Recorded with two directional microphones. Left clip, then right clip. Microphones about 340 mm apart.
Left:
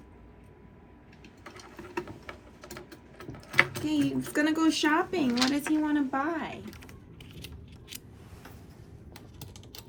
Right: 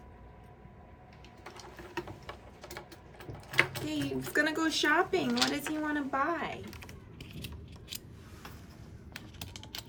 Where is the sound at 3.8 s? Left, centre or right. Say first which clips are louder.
Left 6 dB; centre.